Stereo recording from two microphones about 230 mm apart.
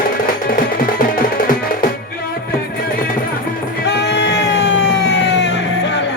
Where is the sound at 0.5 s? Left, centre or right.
Left.